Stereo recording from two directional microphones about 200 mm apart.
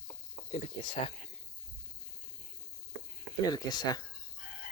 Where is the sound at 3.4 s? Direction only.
20° left (ahead or behind).